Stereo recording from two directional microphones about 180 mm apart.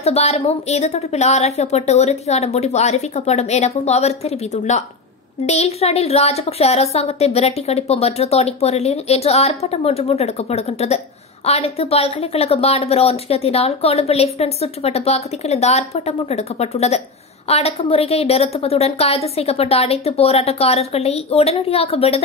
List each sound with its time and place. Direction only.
0.0 s a woman's voice: 35° left (ahead or behind)